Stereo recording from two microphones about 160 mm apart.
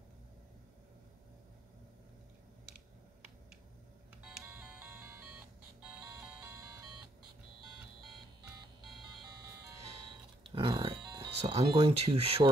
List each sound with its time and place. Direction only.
4.2 s music: 5° right (ahead or behind)
10.5 s speech: 35° right (ahead or behind)